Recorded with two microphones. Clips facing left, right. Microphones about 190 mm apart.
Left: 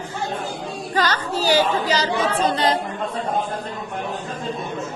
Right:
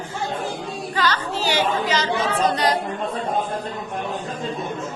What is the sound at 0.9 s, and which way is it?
A woman's voice, 45° left (ahead or behind).